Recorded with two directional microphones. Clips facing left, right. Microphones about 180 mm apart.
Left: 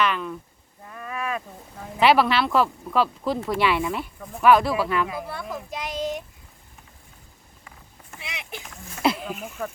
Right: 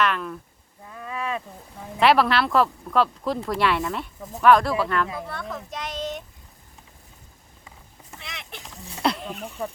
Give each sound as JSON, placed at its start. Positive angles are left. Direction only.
{"t": 0.0, "sound": "speech", "side_deg": 0}
{"t": 0.9, "sound": "a sound", "side_deg": -20}
{"t": 2.0, "sound": "speech", "side_deg": 0}
{"t": 8.2, "sound": "a sound", "side_deg": 5}
{"t": 9.0, "sound": "speech", "side_deg": 5}
{"t": 9.5, "sound": "speech", "side_deg": -30}